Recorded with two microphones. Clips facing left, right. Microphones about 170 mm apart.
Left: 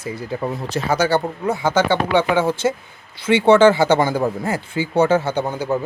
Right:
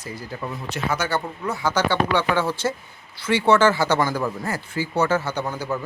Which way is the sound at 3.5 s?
25° left (ahead or behind).